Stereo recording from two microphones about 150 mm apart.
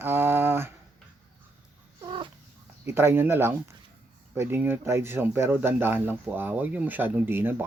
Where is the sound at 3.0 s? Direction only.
15° right (ahead or behind).